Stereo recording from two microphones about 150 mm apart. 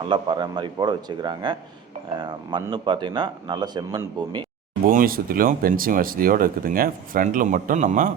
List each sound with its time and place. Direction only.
0.0 s speech: 30° right (ahead or behind)
4.9 s speech: 70° right (ahead or behind)